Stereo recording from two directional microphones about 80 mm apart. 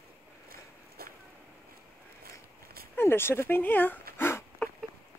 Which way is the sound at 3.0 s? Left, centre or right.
Left.